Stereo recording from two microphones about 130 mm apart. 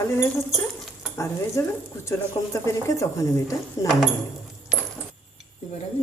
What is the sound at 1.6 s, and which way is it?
Speech, 25° left (ahead or behind).